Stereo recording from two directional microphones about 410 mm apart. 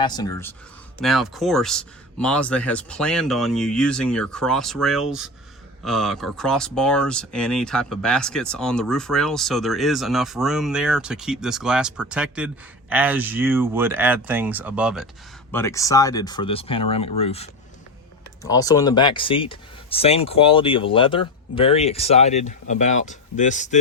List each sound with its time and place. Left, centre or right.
0.0 s speech: centre